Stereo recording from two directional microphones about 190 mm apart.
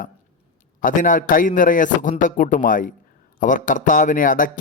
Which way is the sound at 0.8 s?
45° left (ahead or behind).